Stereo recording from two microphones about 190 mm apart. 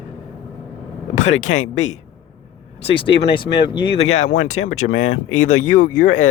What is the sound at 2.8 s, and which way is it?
Speech, 30° left (ahead or behind).